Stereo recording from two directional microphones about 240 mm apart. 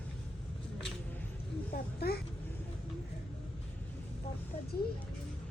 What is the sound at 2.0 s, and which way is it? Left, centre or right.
Speech, left.